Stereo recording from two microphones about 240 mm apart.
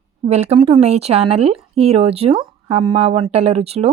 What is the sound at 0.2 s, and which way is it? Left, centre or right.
Speech, right.